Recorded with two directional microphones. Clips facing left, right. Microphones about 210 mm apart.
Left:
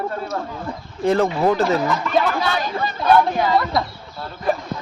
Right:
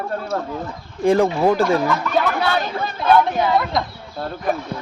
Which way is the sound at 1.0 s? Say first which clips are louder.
Right 2 dB; 15° right (ahead or behind).